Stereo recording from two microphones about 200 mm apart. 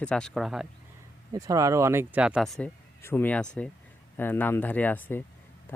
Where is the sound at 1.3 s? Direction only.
15° right (ahead or behind).